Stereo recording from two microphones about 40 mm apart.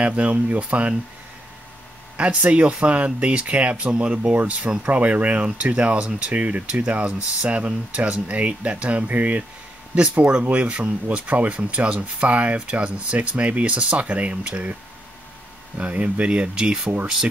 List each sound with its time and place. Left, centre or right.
0.0 s speech: right
2.1 s speech: right
15.8 s speech: right
16.3 s speech: centre